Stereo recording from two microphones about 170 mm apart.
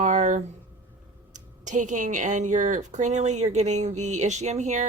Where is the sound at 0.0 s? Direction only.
45° right (ahead or behind).